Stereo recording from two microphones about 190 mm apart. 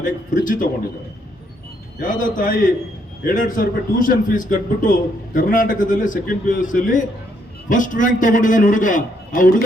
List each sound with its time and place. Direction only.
0.4 s a man's voice: 45° left (ahead or behind)
2.0 s a man's voice: 45° left (ahead or behind)